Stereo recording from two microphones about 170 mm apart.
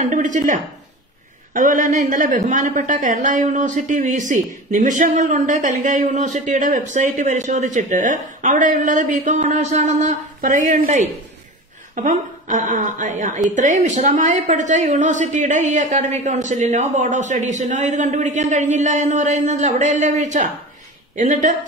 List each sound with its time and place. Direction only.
0.0 s a woman's voice: 50° right (ahead or behind)